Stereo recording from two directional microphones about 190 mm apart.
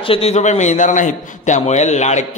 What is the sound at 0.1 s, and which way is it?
A man's voice, 35° left (ahead or behind).